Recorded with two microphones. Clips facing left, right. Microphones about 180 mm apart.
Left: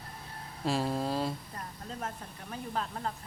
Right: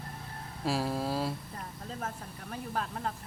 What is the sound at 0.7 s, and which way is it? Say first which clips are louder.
Speech: left 1 dB; 5° right (ahead or behind).